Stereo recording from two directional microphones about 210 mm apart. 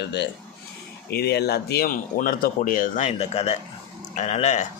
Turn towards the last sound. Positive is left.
turn(degrees=30)  # may be behind; listen again after turning